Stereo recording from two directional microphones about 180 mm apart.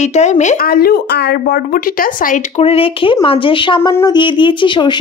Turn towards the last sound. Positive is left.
turn(degrees=25)  # may be behind; listen again after turning